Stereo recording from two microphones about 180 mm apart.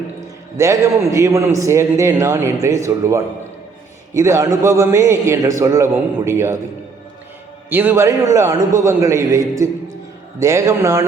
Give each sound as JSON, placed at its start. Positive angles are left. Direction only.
{"t": 0.5, "sound": "a man's voice", "side_deg": -15}
{"t": 7.7, "sound": "a man's voice", "side_deg": -10}